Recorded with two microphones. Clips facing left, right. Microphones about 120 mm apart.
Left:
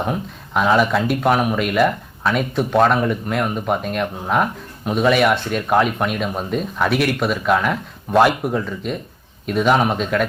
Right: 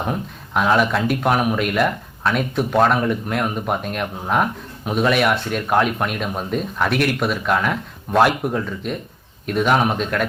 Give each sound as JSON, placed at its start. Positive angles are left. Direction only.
{"t": 0.0, "sound": "speech", "side_deg": 0}